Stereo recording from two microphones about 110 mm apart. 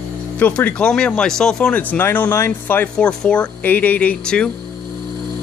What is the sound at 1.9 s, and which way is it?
Speech, 15° left (ahead or behind).